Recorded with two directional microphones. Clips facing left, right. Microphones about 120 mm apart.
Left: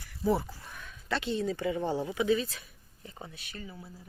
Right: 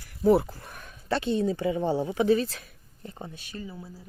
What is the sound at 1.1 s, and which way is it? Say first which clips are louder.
Speech: right 5 dB; 25° right (ahead or behind).